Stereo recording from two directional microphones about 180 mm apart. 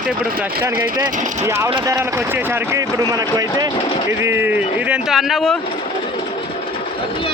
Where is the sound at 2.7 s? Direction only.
20° right (ahead or behind); by 5.5 s centre (ahead or behind).